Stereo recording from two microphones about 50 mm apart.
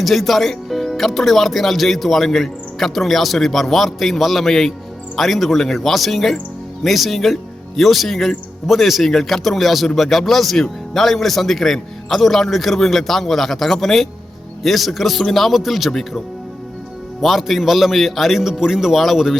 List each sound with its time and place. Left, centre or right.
0.0 s speech: centre